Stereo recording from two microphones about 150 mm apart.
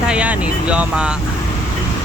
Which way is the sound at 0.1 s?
5° right (ahead or behind).